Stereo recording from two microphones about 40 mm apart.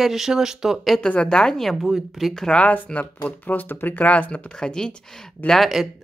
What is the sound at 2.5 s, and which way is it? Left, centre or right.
Speech, left.